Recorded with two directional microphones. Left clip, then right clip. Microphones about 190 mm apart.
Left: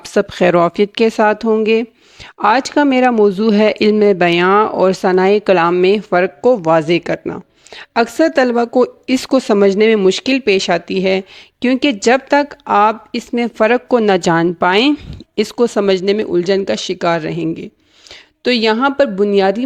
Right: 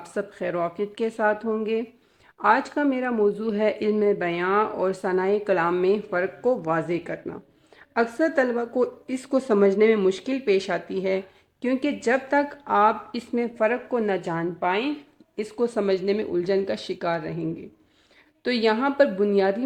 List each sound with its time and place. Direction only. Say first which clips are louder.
0.0 s speech: left 16 dB; 50° left (ahead or behind)
14.3 s speech: left 13 dB; 60° left (ahead or behind)
15.4 s speech: left 11 dB; 40° left (ahead or behind)